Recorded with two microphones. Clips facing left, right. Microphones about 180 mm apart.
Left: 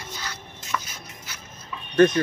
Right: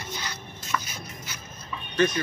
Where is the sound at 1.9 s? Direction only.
55° left (ahead or behind).